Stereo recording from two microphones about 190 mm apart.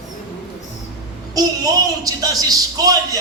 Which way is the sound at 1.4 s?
20° right (ahead or behind).